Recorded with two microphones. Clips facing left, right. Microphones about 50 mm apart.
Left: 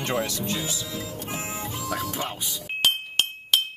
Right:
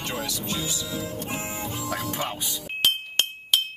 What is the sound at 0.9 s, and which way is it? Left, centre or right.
Music, right.